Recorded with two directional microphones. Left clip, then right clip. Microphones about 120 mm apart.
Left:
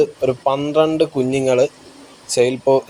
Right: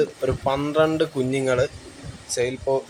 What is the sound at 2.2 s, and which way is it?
Speech, 40° left (ahead or behind).